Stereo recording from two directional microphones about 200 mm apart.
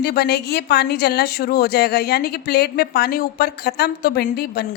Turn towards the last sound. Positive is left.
turn(degrees=50)  # may be behind; listen again after turning